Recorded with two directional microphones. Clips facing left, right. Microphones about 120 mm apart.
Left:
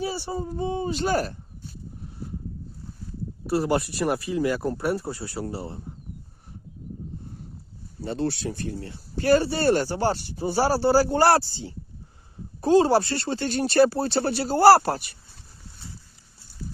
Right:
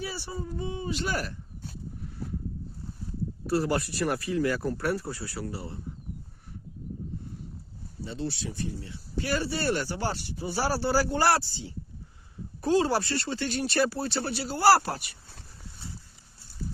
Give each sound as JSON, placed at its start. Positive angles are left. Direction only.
{"t": 0.0, "sound": "speech", "side_deg": 25}
{"t": 3.4, "sound": "speech", "side_deg": 15}
{"t": 8.0, "sound": "speech", "side_deg": 60}